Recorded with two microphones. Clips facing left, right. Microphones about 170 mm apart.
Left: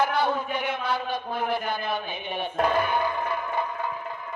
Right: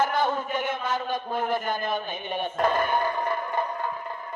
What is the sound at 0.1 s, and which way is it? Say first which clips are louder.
A man's voice: even; 45° right (ahead or behind).